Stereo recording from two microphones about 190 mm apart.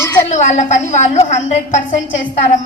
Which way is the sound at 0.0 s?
15° left (ahead or behind).